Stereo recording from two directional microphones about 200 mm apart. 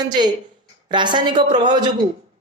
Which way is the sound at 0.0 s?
20° right (ahead or behind).